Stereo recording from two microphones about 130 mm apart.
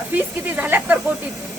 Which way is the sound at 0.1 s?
10° right (ahead or behind).